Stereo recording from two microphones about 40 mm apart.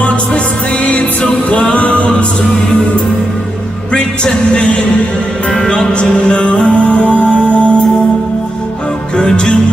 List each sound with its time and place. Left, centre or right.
0.8 s music: left
5.5 s music: left
9.1 s music: left